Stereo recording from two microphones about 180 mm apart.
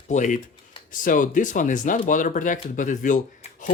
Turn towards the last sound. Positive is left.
turn(degrees=45)  # may be behind; listen again after turning